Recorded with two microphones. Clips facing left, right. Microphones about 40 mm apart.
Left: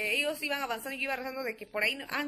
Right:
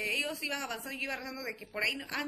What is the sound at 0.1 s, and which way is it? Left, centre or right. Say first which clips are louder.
A woman's voice: left 3 dB; centre.